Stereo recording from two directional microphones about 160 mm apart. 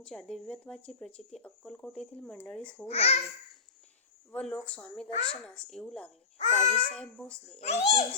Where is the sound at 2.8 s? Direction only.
40° left (ahead or behind).